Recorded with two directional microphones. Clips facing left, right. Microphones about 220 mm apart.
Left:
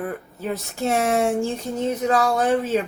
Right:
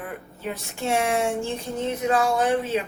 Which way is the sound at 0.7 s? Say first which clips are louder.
Left 2 dB; 40° left (ahead or behind).